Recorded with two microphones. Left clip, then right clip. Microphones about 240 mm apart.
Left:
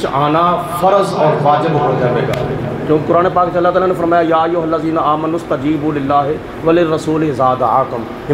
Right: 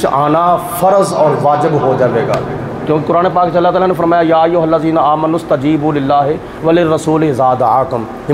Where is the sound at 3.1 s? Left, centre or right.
Right.